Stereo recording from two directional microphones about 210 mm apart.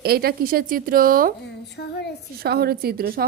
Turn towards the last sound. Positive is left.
turn(degrees=-45)  # may be behind; listen again after turning